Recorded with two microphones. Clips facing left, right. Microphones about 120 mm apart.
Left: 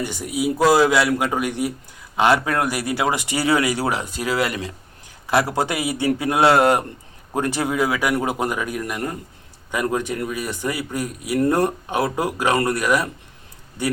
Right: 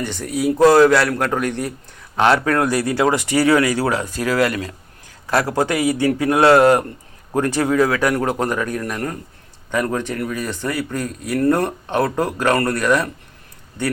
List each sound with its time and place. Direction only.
0.0 s a man's voice: 10° left (ahead or behind)